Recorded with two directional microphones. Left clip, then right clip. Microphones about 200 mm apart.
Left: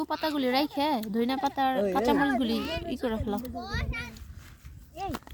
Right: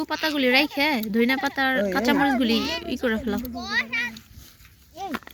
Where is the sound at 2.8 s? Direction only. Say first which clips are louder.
Right 6 dB; 5° left (ahead or behind).